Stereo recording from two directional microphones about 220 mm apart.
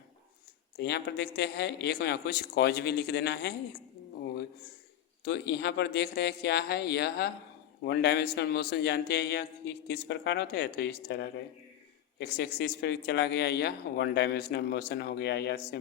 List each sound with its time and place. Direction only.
0.8 s speech: 50° left (ahead or behind)
5.2 s speech: 50° left (ahead or behind)